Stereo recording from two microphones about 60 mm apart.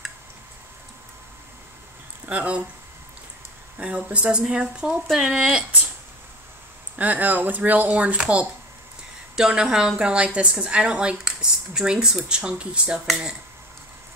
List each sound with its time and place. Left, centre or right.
2.2 s speech: right
3.7 s a woman's voice: centre
7.0 s a woman's voice: right